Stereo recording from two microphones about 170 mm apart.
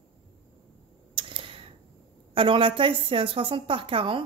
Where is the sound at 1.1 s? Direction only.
30° right (ahead or behind).